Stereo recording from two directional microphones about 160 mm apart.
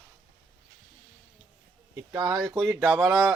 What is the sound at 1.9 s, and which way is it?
Speech, 20° right (ahead or behind).